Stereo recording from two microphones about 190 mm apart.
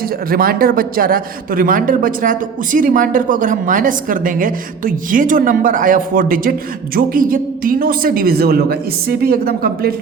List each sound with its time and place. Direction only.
0.3 s a man's voice: 50° right (ahead or behind)